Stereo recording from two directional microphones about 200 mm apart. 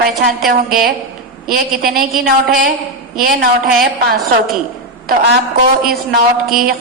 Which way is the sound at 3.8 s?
45° right (ahead or behind).